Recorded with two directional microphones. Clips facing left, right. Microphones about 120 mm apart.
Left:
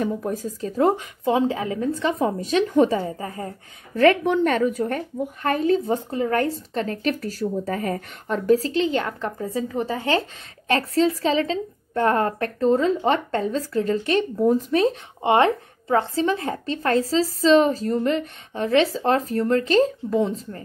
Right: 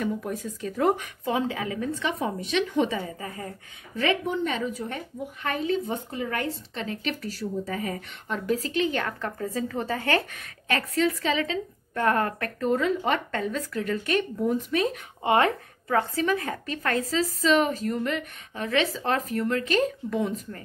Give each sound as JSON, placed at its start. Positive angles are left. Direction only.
{"t": 0.0, "sound": "a woman's voice", "side_deg": 35}
{"t": 3.9, "sound": "a woman's voice", "side_deg": 50}